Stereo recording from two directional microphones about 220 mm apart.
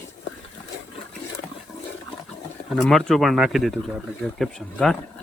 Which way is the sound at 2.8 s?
Centre (ahead or behind).